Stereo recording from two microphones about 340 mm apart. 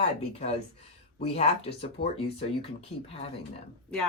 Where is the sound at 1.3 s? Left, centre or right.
Centre.